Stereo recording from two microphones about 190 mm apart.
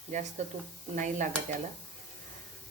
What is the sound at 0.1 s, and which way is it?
Stir, 40° right (ahead or behind).